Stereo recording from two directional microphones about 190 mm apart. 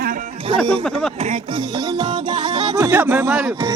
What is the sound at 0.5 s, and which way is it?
Speech, 25° right (ahead or behind).